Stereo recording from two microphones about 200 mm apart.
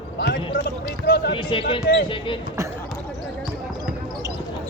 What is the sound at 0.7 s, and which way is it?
Run, 50° left (ahead or behind).